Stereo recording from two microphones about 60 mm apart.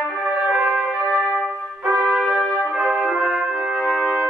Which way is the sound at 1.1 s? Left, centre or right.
Centre.